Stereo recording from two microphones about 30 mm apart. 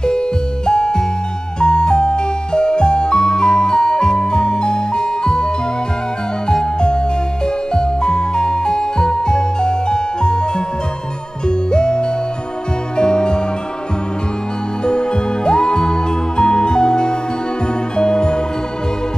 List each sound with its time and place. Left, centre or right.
0.7 s music: left
6.5 s music: left
11.4 s music: left
14.9 s music: left